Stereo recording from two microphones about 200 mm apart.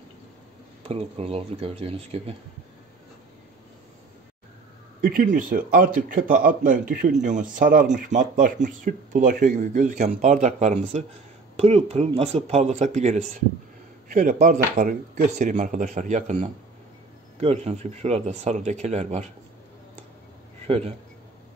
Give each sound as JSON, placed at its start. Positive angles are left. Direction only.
{"t": 0.8, "sound": "speech", "side_deg": -30}
{"t": 5.0, "sound": "a man's voice", "side_deg": -45}
{"t": 20.6, "sound": "a man's voice", "side_deg": -30}